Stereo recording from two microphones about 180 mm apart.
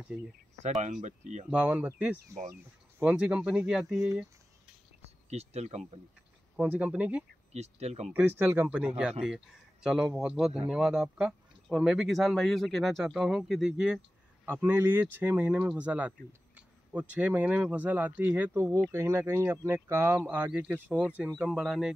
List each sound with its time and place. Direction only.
0.6 s speech: 40° right (ahead or behind)
1.5 s speech: 5° right (ahead or behind)
5.3 s speech: 35° right (ahead or behind)
6.5 s speech: 10° right (ahead or behind)
7.5 s speech: 35° right (ahead or behind)
8.1 s speech: 10° right (ahead or behind)